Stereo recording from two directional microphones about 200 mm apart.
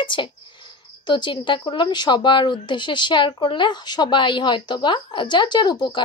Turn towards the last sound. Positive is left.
turn(degrees=20)  # may be behind; listen again after turning